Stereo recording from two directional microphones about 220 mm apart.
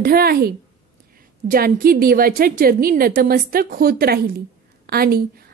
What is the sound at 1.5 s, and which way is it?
A woman's voice, 40° right (ahead or behind).